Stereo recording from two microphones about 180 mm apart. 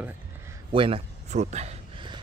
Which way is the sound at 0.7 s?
30° right (ahead or behind).